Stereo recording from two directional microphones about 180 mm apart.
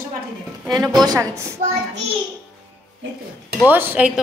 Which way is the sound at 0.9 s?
20° right (ahead or behind).